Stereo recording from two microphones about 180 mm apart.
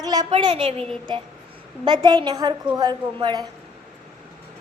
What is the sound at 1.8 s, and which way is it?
A woman's voice, 25° right (ahead or behind).